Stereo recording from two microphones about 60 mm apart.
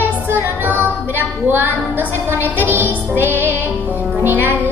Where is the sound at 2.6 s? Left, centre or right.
Right.